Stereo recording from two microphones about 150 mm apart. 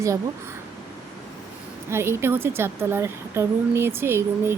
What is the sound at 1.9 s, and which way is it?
A woman's voice, 15° right (ahead or behind).